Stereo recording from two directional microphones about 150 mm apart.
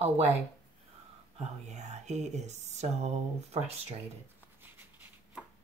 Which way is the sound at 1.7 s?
50° right (ahead or behind).